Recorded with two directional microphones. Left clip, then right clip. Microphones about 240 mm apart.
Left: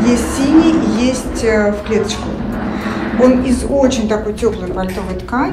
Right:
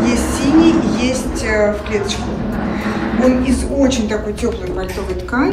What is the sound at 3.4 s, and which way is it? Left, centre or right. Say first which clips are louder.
Speech: left 2 dB; centre.